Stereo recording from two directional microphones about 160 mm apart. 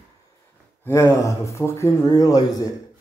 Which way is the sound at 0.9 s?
15° left (ahead or behind).